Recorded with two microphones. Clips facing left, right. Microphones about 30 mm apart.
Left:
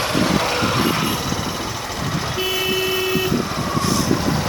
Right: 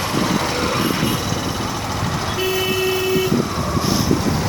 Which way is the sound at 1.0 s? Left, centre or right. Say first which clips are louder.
Right 1 dB; centre.